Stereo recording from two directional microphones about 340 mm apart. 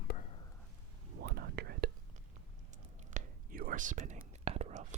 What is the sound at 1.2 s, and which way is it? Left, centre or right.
Whispering, right.